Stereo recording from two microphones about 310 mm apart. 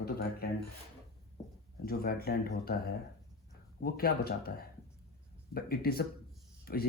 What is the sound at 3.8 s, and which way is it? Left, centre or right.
Speech, left.